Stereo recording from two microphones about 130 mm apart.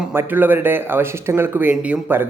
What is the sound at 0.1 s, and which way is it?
Speech, 15° right (ahead or behind).